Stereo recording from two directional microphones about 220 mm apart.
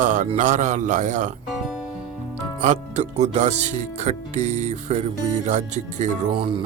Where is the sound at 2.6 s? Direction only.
35° right (ahead or behind).